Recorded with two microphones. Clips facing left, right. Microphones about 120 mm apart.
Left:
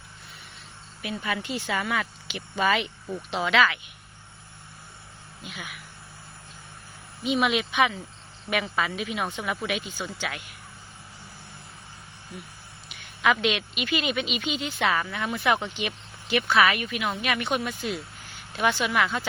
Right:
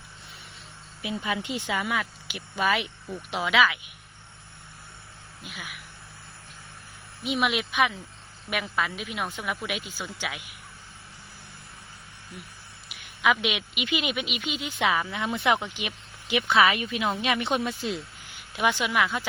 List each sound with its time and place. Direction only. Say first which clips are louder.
1.0 s a woman's voice: even; 20° right (ahead or behind)
5.4 s speech: left 1 dB; centre (ahead or behind)
7.3 s a woman's voice: left 2 dB; 5° right (ahead or behind)
12.3 s a woman's voice: left 3 dB; centre (ahead or behind); by 18.3 s 25° right (ahead or behind)
18.5 s a woman's voice: left 1 dB; 15° right (ahead or behind)